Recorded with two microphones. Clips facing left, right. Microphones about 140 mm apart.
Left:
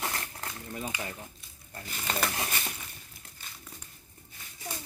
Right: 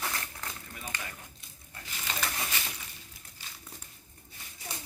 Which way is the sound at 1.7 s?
45° left (ahead or behind).